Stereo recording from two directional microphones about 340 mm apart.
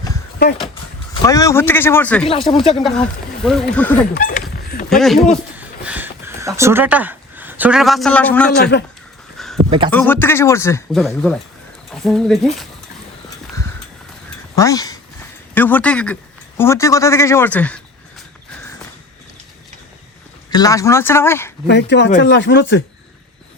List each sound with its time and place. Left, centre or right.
1.2 s speech: centre
2.3 s speech: centre
2.8 s speech: centre
4.1 s speech: left
4.9 s speech: centre
5.5 s a sound: centre
8.5 s speech: left
9.6 s speech: centre
9.9 s speech: centre
14.5 s speech: centre
20.5 s speech: centre
21.7 s speech: left